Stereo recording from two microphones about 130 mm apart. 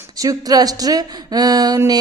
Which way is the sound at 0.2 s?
30° right (ahead or behind).